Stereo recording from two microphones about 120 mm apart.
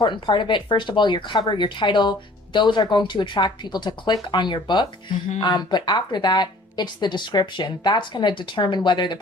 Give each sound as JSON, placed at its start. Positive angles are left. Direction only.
{"t": 0.0, "sound": "speech", "side_deg": 40}